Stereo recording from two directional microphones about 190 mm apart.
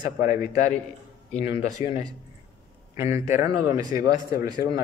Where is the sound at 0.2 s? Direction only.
45° left (ahead or behind).